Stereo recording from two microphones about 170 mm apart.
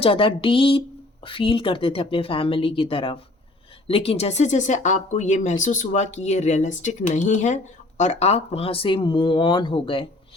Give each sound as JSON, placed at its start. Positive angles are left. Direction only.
{"t": 0.0, "sound": "speech", "side_deg": 30}